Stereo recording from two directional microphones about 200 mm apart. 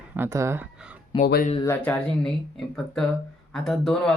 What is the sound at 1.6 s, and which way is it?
Speech, 10° left (ahead or behind).